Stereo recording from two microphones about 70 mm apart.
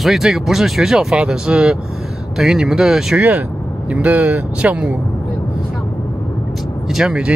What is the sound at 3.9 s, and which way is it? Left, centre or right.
Speech, right.